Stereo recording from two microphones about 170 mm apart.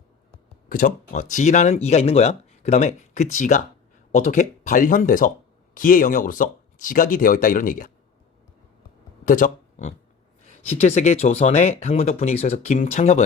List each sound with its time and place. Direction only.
0.7 s speech: 55° left (ahead or behind)
9.2 s speech: 50° left (ahead or behind)